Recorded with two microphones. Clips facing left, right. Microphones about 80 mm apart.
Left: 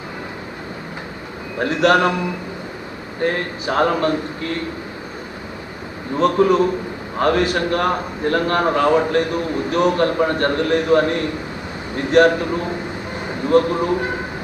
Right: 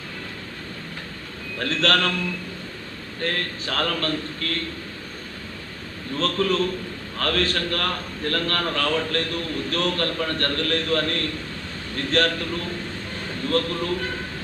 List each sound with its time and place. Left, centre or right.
1.5 s a man's voice: centre
6.1 s a man's voice: centre